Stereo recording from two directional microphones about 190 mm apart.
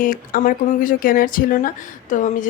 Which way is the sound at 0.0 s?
45° left (ahead or behind).